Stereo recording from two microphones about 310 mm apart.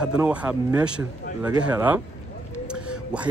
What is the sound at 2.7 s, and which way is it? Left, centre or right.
Whispering, centre.